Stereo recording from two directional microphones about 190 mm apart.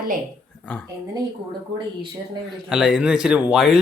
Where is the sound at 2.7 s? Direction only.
5° right (ahead or behind).